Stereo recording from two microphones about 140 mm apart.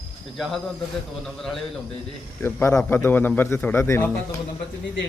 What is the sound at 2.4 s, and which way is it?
A man's voice, 15° left (ahead or behind).